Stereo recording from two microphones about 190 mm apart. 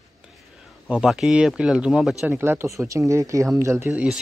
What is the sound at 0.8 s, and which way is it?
Speech, 5° right (ahead or behind).